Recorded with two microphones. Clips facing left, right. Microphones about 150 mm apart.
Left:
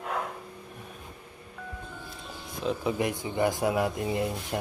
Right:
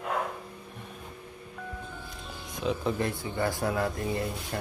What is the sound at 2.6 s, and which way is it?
Speech, centre (ahead or behind).